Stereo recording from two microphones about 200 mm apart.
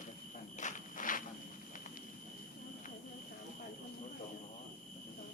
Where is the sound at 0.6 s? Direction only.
40° left (ahead or behind).